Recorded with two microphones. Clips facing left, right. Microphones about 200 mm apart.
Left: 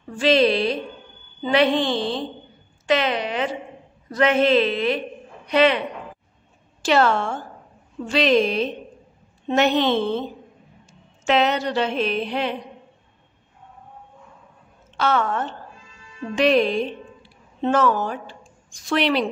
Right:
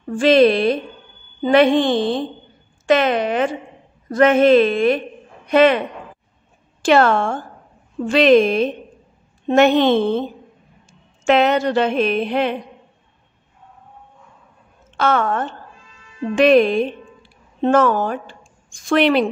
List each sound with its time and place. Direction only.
0.1 s speech: 50° right (ahead or behind)
6.8 s a woman's voice: 55° right (ahead or behind)
15.0 s a woman's voice: 50° right (ahead or behind)